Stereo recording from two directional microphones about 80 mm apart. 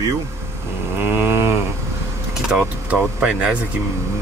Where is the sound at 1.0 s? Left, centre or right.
Right.